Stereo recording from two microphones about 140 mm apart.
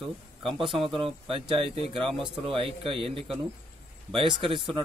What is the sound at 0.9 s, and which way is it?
Speech, 40° right (ahead or behind).